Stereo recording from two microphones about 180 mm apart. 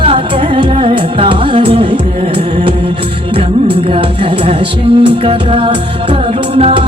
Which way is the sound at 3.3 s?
30° right (ahead or behind).